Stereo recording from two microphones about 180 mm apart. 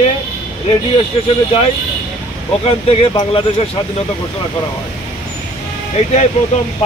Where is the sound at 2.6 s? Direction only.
30° left (ahead or behind).